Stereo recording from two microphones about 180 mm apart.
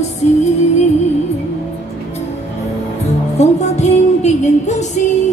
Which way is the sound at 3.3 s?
40° left (ahead or behind).